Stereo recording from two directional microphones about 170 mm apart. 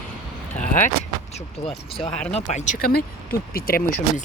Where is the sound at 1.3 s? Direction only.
40° left (ahead or behind).